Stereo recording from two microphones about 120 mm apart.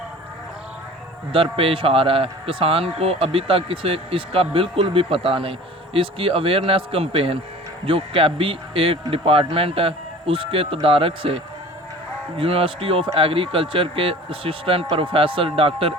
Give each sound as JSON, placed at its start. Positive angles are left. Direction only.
{"t": 1.3, "sound": "a man's voice", "side_deg": -50}